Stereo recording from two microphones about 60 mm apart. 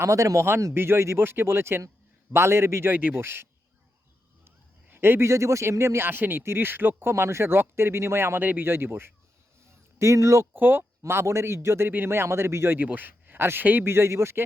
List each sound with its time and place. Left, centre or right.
0.0 s speech: right
0.7 s speech: right
2.9 s speech: right
3.2 s speech: right
4.4 s a man's voice: right
6.1 s speech: right
8.4 s speech: right
8.6 s speech: right
10.0 s speech: right
10.5 s speech: right
11.0 s speech: right
12.8 s speech: right